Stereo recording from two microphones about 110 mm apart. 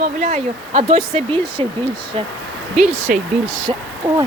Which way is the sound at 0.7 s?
90° right.